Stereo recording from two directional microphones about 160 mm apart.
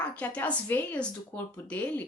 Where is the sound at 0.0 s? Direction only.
10° left (ahead or behind).